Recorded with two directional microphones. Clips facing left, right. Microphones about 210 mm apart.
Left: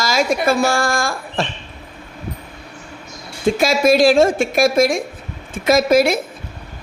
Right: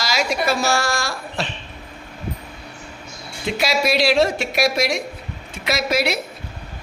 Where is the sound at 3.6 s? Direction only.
50° left (ahead or behind).